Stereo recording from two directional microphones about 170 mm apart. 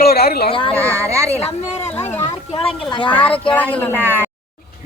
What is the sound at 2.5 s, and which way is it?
Speech, 35° left (ahead or behind).